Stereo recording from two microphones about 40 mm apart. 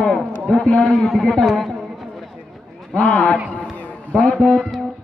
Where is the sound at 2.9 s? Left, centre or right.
Left.